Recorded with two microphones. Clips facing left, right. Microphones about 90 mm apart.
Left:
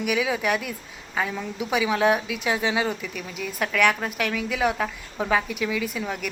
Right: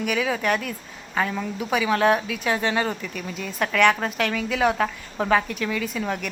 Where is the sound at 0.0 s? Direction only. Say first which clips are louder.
Even; 10° left (ahead or behind).